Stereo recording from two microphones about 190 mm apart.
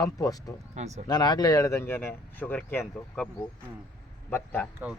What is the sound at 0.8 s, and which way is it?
Speech, 35° right (ahead or behind).